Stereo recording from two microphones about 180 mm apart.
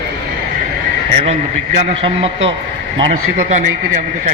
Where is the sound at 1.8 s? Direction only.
35° right (ahead or behind).